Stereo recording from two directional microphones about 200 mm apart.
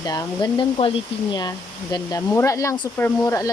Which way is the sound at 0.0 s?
20° left (ahead or behind).